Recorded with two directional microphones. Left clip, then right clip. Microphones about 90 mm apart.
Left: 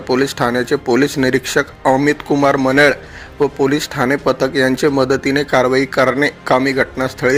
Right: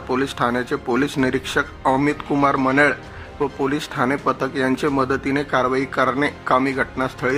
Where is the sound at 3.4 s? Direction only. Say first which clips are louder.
Left 7 dB; 20° left (ahead or behind).